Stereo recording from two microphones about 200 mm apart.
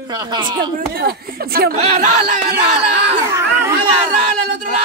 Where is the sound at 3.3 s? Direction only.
15° right (ahead or behind).